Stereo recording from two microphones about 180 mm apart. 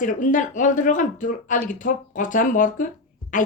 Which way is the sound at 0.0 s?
45° left (ahead or behind).